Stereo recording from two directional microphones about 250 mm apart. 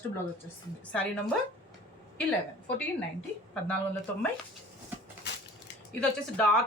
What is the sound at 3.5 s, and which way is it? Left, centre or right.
Speech, centre.